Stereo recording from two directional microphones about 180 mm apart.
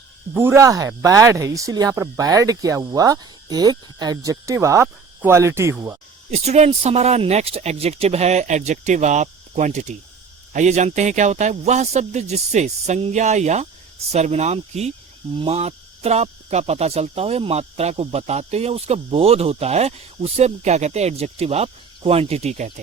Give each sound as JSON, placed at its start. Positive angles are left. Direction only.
{"t": 0.3, "sound": "speech", "side_deg": -15}
{"t": 6.3, "sound": "speech", "side_deg": -35}